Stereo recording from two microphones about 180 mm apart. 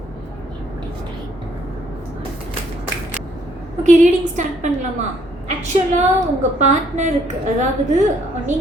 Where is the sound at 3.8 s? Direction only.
40° right (ahead or behind).